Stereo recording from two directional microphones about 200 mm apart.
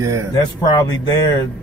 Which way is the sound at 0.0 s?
15° right (ahead or behind).